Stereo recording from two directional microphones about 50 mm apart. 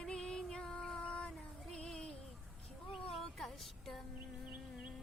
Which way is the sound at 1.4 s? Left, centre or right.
Centre.